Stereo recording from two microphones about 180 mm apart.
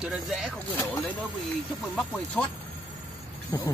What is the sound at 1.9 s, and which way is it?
Speech, 5° left (ahead or behind).